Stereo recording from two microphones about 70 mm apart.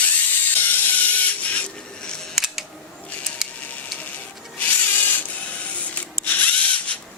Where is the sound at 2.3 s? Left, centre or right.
Centre.